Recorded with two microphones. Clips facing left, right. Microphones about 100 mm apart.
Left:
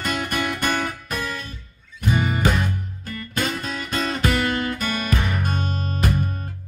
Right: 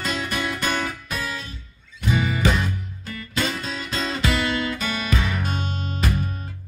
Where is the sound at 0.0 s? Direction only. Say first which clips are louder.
Left 2 dB; 55° left (ahead or behind).